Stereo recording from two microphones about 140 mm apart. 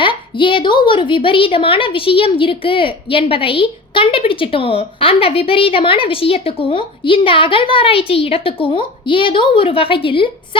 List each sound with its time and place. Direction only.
0.0 s a woman's voice: 35° left (ahead or behind)